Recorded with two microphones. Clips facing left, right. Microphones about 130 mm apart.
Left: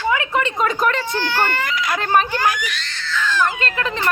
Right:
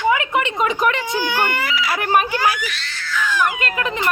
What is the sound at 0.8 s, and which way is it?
Speech, 15° right (ahead or behind).